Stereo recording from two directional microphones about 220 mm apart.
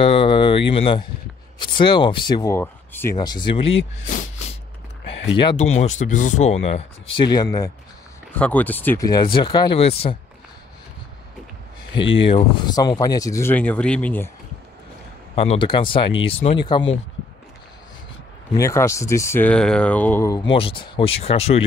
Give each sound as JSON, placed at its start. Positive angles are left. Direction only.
{"t": 0.0, "sound": "speech", "side_deg": 25}
{"t": 5.4, "sound": "speech", "side_deg": 25}
{"t": 8.4, "sound": "speech", "side_deg": 5}
{"t": 11.9, "sound": "speech", "side_deg": 55}
{"t": 12.3, "sound": "speech", "side_deg": 20}
{"t": 15.3, "sound": "speech", "side_deg": 25}
{"t": 18.6, "sound": "speech", "side_deg": 15}
{"t": 20.5, "sound": "speech", "side_deg": 25}